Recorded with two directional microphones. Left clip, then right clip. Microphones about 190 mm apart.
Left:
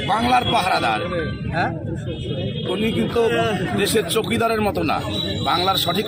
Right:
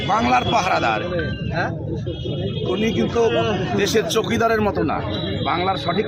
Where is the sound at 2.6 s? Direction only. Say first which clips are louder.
Right 1 dB; centre (ahead or behind).